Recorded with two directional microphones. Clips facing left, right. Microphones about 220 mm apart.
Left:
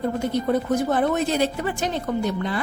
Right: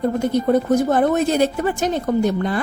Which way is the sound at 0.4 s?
45° right (ahead or behind).